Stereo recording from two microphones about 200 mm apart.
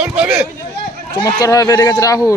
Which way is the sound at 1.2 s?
15° left (ahead or behind).